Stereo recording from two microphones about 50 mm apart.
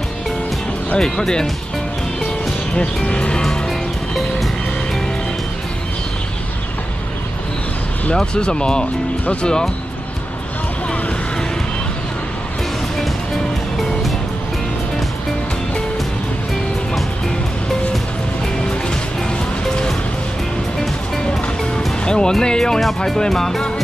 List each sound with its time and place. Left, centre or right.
0.9 s speech: centre
2.7 s speech: left
8.1 s speech: centre
22.0 s speech: centre